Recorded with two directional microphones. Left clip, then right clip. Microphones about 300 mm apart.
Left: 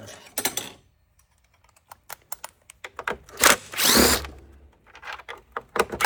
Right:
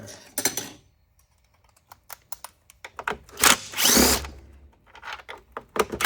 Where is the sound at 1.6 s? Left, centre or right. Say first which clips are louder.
Left 3 dB; left.